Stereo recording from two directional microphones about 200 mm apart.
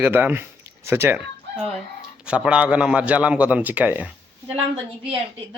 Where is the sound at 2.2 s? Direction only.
5° right (ahead or behind).